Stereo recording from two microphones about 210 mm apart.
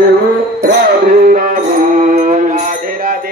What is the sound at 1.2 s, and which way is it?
Music, 40° right (ahead or behind).